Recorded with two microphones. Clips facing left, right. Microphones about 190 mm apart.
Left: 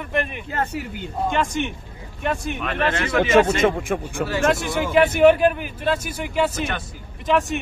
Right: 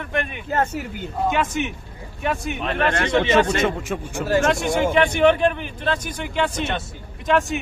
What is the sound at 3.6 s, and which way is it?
Speech, 50° left (ahead or behind).